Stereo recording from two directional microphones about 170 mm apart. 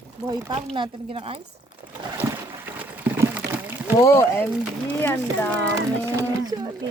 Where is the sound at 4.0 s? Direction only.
15° left (ahead or behind).